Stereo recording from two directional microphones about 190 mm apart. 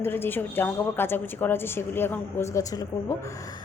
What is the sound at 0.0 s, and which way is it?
A woman's voice, 10° left (ahead or behind).